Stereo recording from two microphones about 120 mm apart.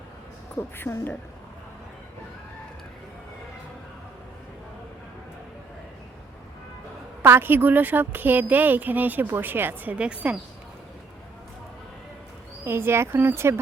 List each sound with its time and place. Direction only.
0.5 s a woman's voice: 20° left (ahead or behind)
7.2 s a woman's voice: 20° right (ahead or behind)
12.6 s speech: 20° right (ahead or behind)